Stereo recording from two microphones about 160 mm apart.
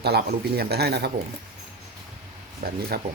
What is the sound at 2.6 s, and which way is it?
Speech, 70° right (ahead or behind).